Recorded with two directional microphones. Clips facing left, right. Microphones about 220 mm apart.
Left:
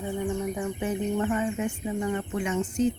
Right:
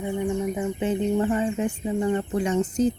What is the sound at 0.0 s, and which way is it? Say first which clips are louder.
Speech: right 3 dB; 20° right (ahead or behind).